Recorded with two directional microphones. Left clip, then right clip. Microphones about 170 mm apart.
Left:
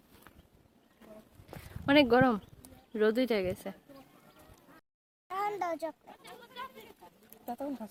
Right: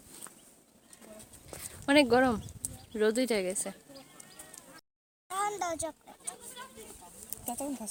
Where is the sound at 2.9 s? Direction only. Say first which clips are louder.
Even; 5° left (ahead or behind).